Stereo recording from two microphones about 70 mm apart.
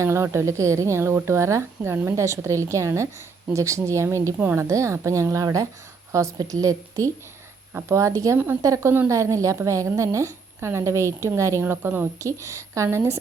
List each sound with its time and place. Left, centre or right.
0.0 s a woman's voice: right
11.6 s a woman's voice: right
12.2 s a woman's voice: right